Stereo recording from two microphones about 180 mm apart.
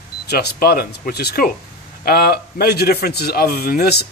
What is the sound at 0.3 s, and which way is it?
A man's voice, 60° left (ahead or behind).